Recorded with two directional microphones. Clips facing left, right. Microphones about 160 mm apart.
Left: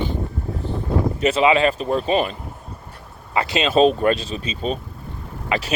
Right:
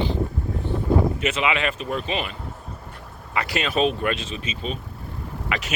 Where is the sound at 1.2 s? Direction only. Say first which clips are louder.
Left 7 dB; 35° left (ahead or behind).